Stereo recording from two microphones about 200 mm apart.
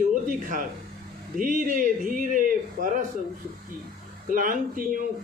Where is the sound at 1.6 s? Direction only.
40° right (ahead or behind).